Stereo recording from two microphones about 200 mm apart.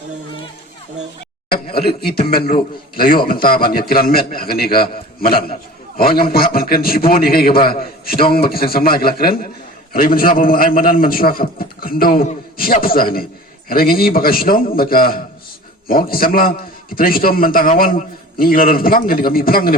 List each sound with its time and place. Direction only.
1.5 s a man's voice: 50° left (ahead or behind)